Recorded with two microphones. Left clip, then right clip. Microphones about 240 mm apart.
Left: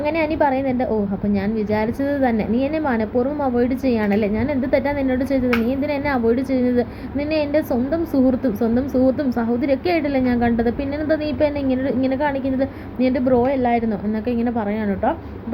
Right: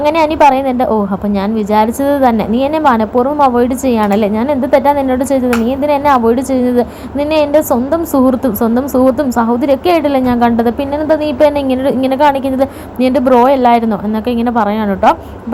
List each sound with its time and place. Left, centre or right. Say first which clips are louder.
0.0 s a woman's voice: right 10 dB; centre